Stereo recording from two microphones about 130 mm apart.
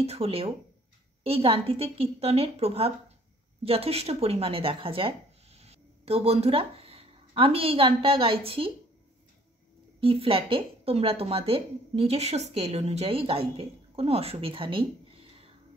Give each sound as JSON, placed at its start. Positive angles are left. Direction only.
{"t": 0.0, "sound": "a woman's voice", "side_deg": -50}
{"t": 9.9, "sound": "a woman's voice", "side_deg": -45}